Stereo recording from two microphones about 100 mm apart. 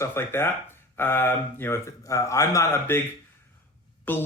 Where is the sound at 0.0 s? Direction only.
25° left (ahead or behind).